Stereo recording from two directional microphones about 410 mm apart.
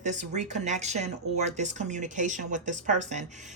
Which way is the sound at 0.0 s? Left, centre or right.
Centre.